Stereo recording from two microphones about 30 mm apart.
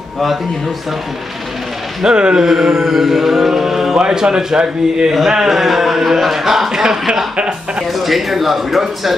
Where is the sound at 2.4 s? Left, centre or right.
Centre.